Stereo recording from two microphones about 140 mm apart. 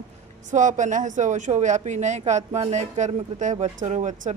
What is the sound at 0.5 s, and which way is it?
Speech, 65° right (ahead or behind).